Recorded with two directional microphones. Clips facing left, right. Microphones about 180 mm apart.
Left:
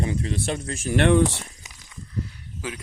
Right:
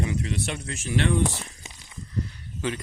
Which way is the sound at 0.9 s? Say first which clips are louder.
Left 6 dB; 70° left (ahead or behind).